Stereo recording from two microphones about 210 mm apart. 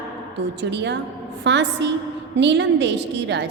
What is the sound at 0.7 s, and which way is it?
A woman's voice, 55° right (ahead or behind).